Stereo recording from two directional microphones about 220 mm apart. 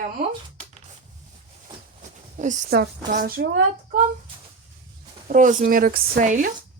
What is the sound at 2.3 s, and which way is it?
Speech, 35° right (ahead or behind).